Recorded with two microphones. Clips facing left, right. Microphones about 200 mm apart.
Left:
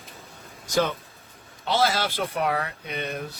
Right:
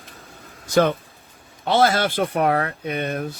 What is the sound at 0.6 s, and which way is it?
Speech, 55° right (ahead or behind).